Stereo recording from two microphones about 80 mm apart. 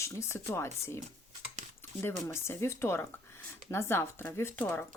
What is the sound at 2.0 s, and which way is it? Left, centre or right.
Speech, left.